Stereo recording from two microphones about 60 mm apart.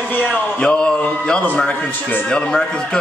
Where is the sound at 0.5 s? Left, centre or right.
Centre.